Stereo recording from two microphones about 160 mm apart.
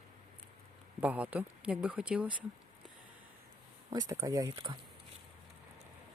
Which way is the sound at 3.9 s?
20° right (ahead or behind).